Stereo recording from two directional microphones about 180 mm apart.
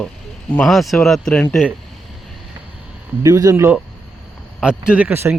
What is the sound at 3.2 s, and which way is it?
Speech, 15° right (ahead or behind).